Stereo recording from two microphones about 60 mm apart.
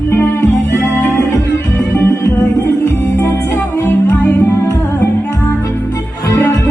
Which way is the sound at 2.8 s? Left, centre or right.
Left.